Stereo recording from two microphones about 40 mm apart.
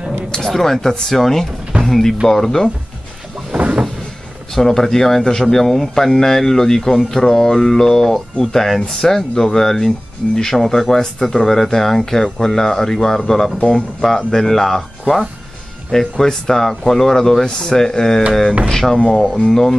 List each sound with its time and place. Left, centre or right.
0.3 s speech: centre
3.5 s cupboard open or close: centre
4.6 s speech: centre
13.6 s speech: left
14.0 s speech: centre